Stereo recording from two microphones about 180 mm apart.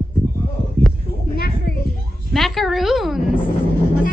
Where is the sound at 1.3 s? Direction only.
55° left (ahead or behind).